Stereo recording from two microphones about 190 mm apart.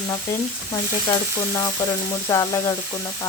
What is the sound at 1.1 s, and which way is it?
Speech, 20° left (ahead or behind).